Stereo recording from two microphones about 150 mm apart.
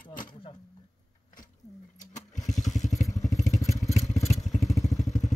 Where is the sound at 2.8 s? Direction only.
55° left (ahead or behind).